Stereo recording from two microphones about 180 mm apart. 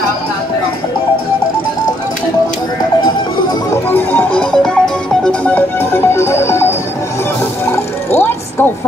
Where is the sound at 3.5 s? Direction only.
15° left (ahead or behind).